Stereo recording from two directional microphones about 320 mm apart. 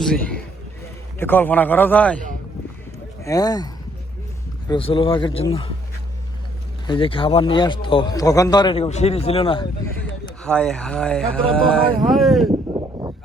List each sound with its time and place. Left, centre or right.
0.0 s a sound: centre
1.2 s speech: centre
3.2 s a man's voice: centre
4.7 s a man's voice: centre
6.8 s a man's voice: centre
10.4 s speech: centre
12.7 s a sound: centre